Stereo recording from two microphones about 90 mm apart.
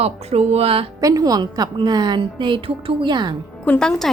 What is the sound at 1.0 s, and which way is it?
A woman's voice, 40° right (ahead or behind).